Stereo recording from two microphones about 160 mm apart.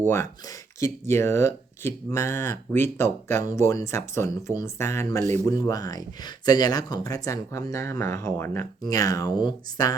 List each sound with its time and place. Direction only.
0.1 s speech: 15° left (ahead or behind)